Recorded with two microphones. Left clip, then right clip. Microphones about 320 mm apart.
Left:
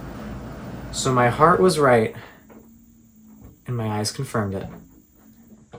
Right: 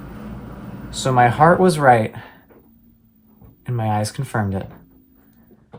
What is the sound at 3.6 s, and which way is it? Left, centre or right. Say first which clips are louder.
Speech: right 5 dB; right.